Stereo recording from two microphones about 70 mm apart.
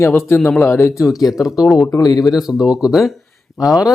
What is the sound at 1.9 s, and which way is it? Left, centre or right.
Speech, left.